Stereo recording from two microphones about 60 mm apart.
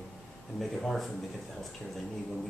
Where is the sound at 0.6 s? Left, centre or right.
Centre.